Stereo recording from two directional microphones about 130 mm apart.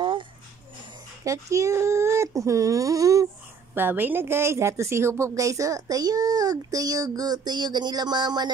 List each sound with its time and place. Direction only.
1.2 s a woman's voice: 25° right (ahead or behind)
3.7 s a woman's voice: 15° right (ahead or behind); by 8.5 s 35° right (ahead or behind)